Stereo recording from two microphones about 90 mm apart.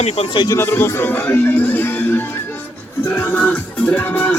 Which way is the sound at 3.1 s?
20° left (ahead or behind).